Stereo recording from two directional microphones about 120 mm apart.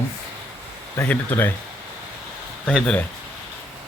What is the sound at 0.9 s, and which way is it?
Speech, 15° left (ahead or behind).